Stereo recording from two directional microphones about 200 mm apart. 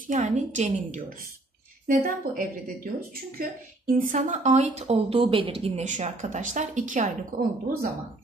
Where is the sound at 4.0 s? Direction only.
40° right (ahead or behind).